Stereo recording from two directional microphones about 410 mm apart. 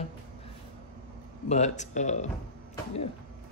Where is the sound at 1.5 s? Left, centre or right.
Centre.